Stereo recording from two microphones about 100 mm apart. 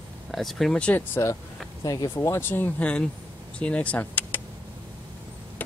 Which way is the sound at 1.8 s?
40° left (ahead or behind).